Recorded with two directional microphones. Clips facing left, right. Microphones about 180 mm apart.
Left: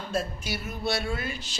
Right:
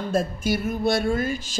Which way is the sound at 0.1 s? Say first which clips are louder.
Right 7 dB; 50° right (ahead or behind).